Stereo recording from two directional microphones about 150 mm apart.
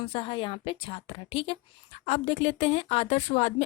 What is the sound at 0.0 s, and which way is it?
A woman's voice, 35° left (ahead or behind).